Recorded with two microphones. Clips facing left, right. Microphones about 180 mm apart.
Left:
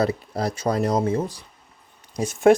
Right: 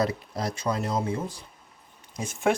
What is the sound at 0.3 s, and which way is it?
Speech, 40° left (ahead or behind).